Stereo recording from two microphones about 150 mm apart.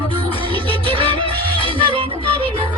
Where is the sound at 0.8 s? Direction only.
35° right (ahead or behind).